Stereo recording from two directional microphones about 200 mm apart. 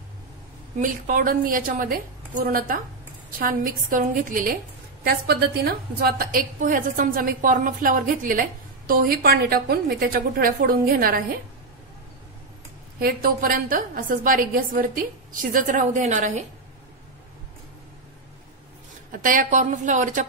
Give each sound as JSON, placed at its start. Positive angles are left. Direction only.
{"t": 0.7, "sound": "a woman's voice", "side_deg": -40}
{"t": 13.0, "sound": "a woman's voice", "side_deg": -45}
{"t": 19.1, "sound": "a woman's voice", "side_deg": -40}